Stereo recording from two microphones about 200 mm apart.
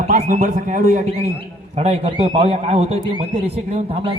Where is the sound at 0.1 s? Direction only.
35° right (ahead or behind).